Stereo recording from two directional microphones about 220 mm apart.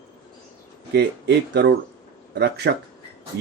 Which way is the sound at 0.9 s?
50° right (ahead or behind).